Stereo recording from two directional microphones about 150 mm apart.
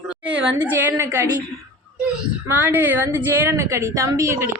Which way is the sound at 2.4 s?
10° right (ahead or behind).